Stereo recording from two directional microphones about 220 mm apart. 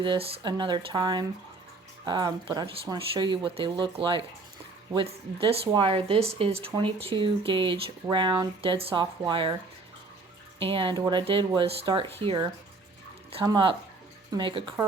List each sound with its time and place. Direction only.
0.0 s speech: 20° right (ahead or behind)
10.6 s speech: 25° right (ahead or behind)